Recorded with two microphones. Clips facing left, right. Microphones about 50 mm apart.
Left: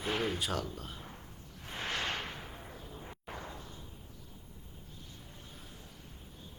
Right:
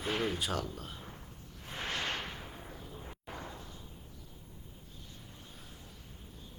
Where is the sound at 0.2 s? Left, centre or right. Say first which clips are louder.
Even; centre.